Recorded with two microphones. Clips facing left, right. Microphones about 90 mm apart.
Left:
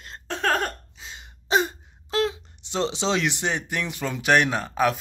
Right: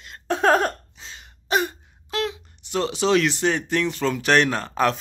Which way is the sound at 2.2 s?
25° left (ahead or behind).